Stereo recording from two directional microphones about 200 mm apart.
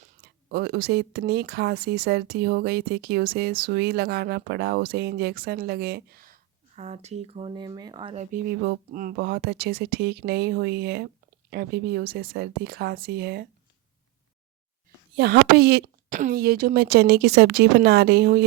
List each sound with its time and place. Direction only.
0.0 s a sound: 50° right (ahead or behind)
1.3 s speech: 50° right (ahead or behind)
6.7 s speech: 30° right (ahead or behind)
8.6 s speech: 45° right (ahead or behind)
15.1 s speech: 55° right (ahead or behind)
16.0 s speech: 40° right (ahead or behind)